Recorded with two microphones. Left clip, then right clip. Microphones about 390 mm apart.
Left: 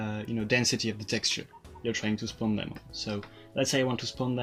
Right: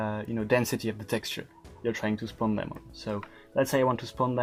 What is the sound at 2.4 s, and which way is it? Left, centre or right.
Speech, right.